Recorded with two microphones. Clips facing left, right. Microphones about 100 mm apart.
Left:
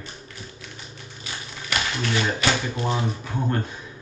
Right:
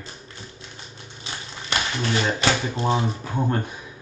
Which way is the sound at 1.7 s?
30° right (ahead or behind).